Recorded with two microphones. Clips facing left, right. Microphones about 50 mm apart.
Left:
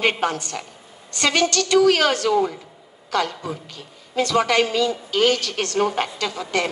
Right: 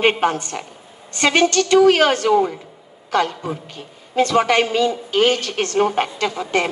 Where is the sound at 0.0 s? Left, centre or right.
Right.